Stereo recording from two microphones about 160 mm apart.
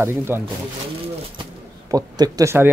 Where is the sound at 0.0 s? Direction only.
15° right (ahead or behind).